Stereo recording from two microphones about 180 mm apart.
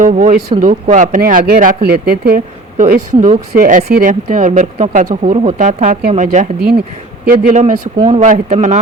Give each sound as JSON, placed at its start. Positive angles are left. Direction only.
{"t": 0.0, "sound": "a man's voice", "side_deg": -45}